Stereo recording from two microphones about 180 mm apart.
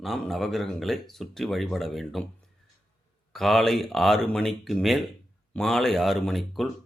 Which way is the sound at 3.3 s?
Centre (ahead or behind).